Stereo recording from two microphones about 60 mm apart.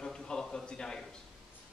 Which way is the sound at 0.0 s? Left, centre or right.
Centre.